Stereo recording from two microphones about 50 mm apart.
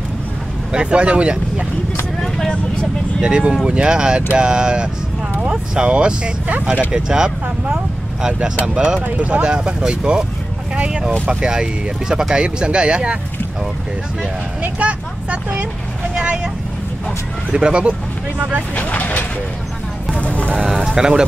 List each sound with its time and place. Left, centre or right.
0.7 s speech: right
2.2 s vehicle: centre
3.2 s speech: centre
9.0 s speech: right
14.6 s speech: right
17.5 s speech: centre
18.8 s speech: left
20.2 s a sound: left
20.5 s speech: centre